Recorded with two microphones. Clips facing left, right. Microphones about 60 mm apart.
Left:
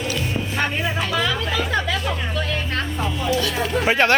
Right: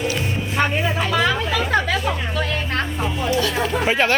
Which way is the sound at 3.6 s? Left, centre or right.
Centre.